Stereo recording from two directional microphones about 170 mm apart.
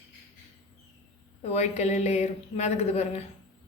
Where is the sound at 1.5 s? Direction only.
40° left (ahead or behind).